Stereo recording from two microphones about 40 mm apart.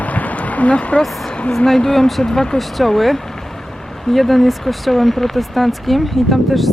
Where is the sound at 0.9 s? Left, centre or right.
Left.